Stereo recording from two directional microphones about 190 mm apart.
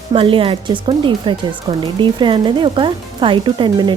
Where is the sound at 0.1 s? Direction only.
30° right (ahead or behind).